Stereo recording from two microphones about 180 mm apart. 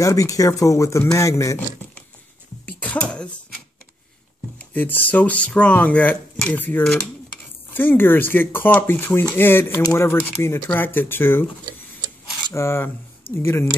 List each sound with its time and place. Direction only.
0.0 s speech: 20° left (ahead or behind)
2.6 s a sound: 10° left (ahead or behind)
4.6 s speech: 10° left (ahead or behind)
12.5 s speech: 15° left (ahead or behind)